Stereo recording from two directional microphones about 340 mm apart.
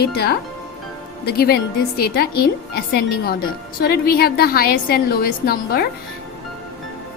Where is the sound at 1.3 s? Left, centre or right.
Left.